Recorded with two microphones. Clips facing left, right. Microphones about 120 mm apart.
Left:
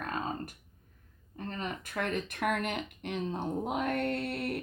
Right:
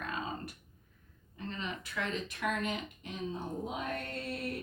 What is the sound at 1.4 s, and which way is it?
Speech, 45° left (ahead or behind).